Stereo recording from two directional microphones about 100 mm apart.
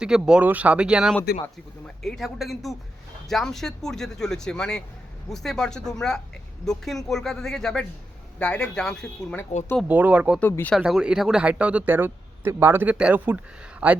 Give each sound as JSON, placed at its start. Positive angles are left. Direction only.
{"t": 0.0, "sound": "speech", "side_deg": -5}
{"t": 2.0, "sound": "a man's voice", "side_deg": 5}
{"t": 9.3, "sound": "speech", "side_deg": 20}
{"t": 9.9, "sound": "speech", "side_deg": -15}